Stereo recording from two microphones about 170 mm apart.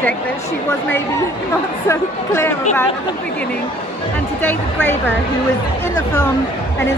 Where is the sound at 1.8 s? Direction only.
15° left (ahead or behind).